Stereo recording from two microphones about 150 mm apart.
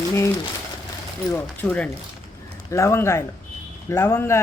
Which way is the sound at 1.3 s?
10° left (ahead or behind).